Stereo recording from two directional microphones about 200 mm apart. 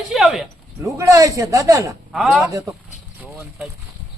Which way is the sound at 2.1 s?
Centre (ahead or behind).